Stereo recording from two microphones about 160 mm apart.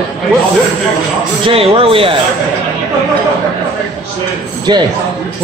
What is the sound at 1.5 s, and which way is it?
Speech, 35° right (ahead or behind).